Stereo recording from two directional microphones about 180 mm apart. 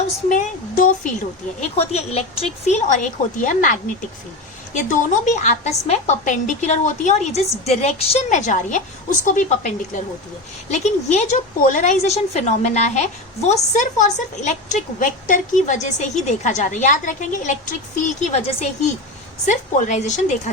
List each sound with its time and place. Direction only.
0.3 s a woman's voice: 45° left (ahead or behind)